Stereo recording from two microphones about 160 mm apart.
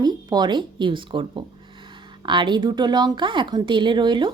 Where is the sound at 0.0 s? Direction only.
25° right (ahead or behind).